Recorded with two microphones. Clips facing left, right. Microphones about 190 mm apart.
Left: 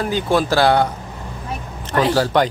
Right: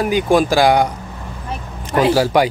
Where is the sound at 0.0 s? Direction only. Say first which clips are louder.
Right 4 dB; 15° right (ahead or behind).